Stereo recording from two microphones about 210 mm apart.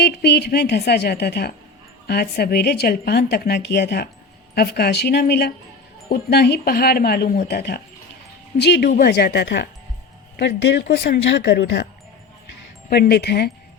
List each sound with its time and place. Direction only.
0.0 s a woman's voice: 50° left (ahead or behind)
12.9 s a woman's voice: 50° left (ahead or behind)